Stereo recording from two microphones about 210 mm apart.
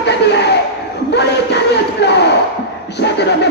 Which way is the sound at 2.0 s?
55° left (ahead or behind).